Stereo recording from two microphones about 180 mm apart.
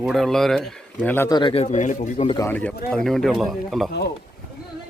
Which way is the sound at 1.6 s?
45° left (ahead or behind).